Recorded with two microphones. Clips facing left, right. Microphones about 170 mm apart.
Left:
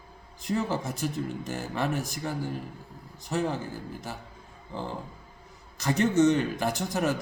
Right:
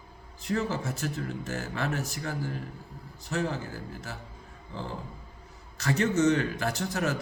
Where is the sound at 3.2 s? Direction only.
15° left (ahead or behind).